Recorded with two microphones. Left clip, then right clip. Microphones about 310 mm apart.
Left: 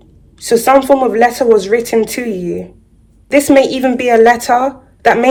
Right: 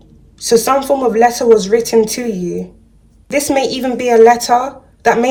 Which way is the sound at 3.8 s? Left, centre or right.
Left.